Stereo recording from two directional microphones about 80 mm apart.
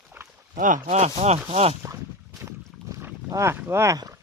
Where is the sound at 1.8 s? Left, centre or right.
Right.